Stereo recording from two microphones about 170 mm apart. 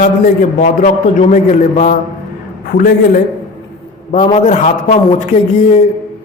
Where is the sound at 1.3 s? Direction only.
45° left (ahead or behind).